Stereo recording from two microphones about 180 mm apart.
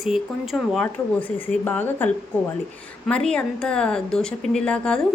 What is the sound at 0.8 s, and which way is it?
A woman's voice, 10° left (ahead or behind).